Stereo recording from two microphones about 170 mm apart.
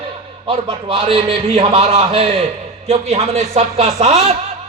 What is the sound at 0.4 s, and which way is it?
A man's voice, 35° right (ahead or behind).